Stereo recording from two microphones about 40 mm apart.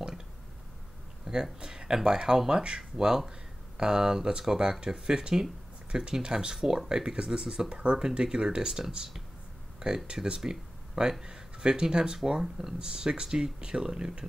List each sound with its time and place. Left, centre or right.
1.2 s speech: centre